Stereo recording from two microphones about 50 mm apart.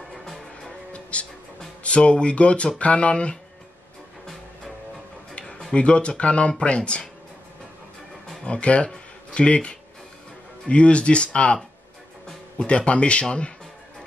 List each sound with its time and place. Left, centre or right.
1.1 s speech: left
5.4 s music: centre
5.8 s speech: left
8.5 s speech: left